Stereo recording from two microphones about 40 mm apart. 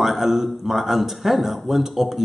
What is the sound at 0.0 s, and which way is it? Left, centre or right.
A man's voice, centre.